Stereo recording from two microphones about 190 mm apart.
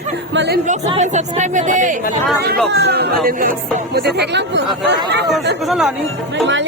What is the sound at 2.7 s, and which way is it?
Speech, 55° right (ahead or behind).